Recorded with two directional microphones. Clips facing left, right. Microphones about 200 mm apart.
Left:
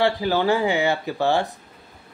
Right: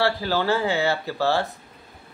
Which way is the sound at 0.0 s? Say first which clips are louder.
Left 3 dB; 15° left (ahead or behind).